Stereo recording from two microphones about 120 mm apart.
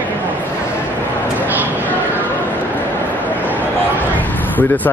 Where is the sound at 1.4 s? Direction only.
15° right (ahead or behind).